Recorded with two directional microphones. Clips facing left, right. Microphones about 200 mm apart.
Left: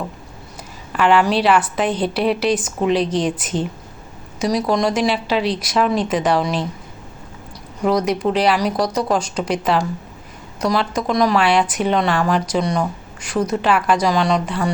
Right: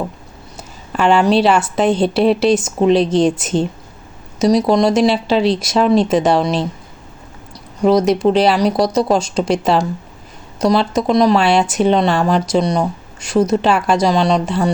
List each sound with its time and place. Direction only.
0.9 s speech: 25° right (ahead or behind)
7.9 s speech: 25° right (ahead or behind)